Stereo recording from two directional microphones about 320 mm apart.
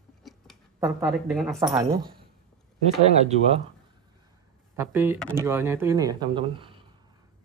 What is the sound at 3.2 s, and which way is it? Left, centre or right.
Speech, centre.